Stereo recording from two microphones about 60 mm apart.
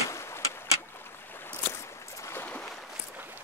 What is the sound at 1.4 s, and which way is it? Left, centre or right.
Boat, left.